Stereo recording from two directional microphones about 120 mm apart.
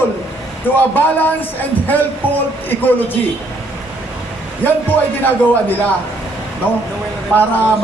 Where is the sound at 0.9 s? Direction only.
15° left (ahead or behind).